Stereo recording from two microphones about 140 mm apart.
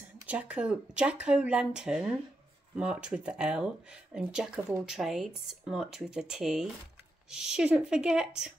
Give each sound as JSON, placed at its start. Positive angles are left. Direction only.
{"t": 0.3, "sound": "speech", "side_deg": -10}